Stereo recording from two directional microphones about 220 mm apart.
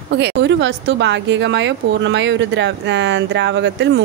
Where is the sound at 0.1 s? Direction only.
50° right (ahead or behind).